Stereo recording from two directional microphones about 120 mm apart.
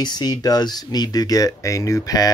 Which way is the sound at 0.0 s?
30° left (ahead or behind).